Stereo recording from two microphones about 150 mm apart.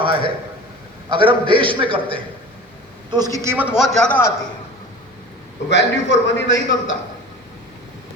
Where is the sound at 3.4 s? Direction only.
15° right (ahead or behind); by 4.3 s 10° left (ahead or behind).